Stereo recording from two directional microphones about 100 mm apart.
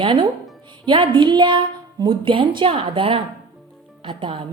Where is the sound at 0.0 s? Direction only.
55° right (ahead or behind).